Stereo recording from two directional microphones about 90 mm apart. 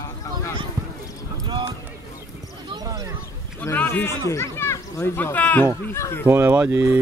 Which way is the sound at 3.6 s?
20° left (ahead or behind).